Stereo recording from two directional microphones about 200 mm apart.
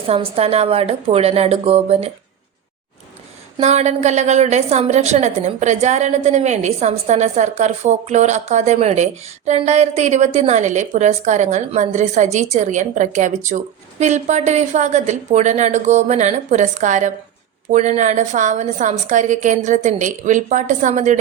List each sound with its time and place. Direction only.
0.1 s a woman's voice: 30° right (ahead or behind)
3.6 s speech: 35° right (ahead or behind)